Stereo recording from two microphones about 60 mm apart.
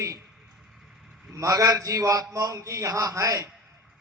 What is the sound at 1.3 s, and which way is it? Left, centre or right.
A man's voice, right.